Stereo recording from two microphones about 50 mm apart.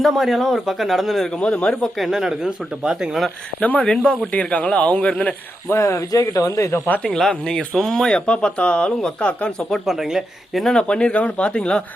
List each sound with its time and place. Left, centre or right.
0.0 s a man's voice: centre
1.4 s speech: left
2.0 s speech: centre
3.6 s speech: left
5.6 s speech: left
7.0 s speech: centre
9.6 s speech: centre
9.8 s a man's voice: centre
10.6 s speech: centre